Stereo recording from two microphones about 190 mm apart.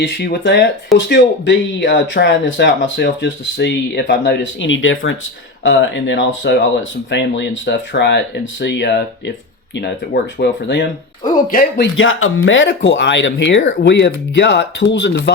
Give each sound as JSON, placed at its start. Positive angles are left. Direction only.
{"t": 0.0, "sound": "speech", "side_deg": 60}
{"t": 0.9, "sound": "speech", "side_deg": 75}
{"t": 5.6, "sound": "speech", "side_deg": 75}
{"t": 10.3, "sound": "speech", "side_deg": 65}
{"t": 11.8, "sound": "speech", "side_deg": 90}